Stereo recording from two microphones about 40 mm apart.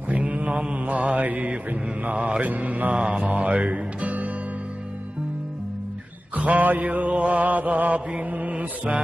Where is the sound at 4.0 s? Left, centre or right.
Right.